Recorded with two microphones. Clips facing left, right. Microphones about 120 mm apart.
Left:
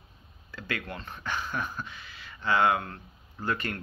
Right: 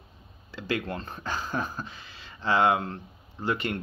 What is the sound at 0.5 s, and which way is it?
Speech, 30° right (ahead or behind).